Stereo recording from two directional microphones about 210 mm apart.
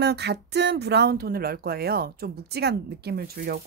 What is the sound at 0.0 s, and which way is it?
A woman's voice, 50° right (ahead or behind).